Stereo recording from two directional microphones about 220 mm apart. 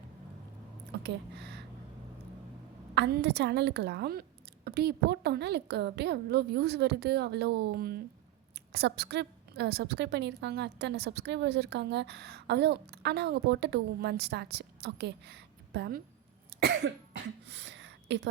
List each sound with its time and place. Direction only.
1.0 s speech: 50° right (ahead or behind)
2.9 s a woman's voice: 50° right (ahead or behind)